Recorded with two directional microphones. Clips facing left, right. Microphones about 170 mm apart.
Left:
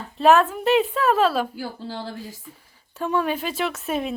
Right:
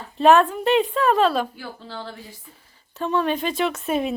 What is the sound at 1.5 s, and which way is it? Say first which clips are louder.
Speech: left 4 dB; 35° left (ahead or behind).